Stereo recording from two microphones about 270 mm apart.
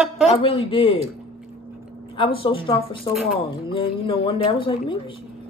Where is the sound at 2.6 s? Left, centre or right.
Centre.